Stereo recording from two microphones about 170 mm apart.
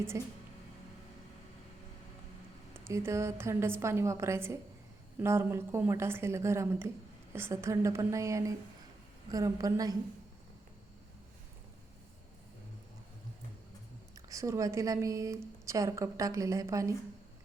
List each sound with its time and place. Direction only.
0.1 s a woman's voice: 15° right (ahead or behind)
2.7 s a woman's voice: 15° right (ahead or behind)
14.2 s speech: 20° right (ahead or behind)